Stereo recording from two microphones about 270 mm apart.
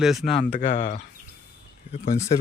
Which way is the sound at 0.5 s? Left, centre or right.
Left.